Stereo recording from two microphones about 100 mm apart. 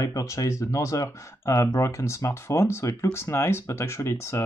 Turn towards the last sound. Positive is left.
turn(degrees=30)  # may be behind; listen again after turning